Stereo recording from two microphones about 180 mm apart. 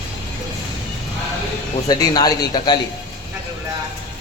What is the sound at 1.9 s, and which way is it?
Speech, 20° left (ahead or behind).